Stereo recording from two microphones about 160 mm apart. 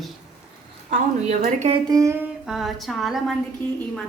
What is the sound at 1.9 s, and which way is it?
Humming, 20° right (ahead or behind).